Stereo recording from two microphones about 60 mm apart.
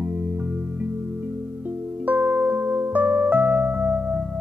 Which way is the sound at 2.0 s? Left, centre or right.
Right.